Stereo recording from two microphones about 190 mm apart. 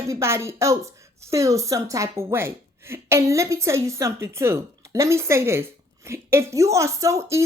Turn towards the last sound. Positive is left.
turn(degrees=-15)  # may be behind; listen again after turning